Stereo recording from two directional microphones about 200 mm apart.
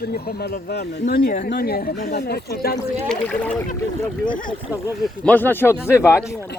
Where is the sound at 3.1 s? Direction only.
5° left (ahead or behind).